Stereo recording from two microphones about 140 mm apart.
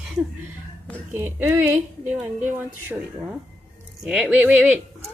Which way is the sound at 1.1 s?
15° right (ahead or behind).